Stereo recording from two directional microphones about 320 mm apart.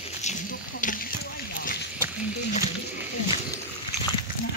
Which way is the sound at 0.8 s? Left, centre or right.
Left.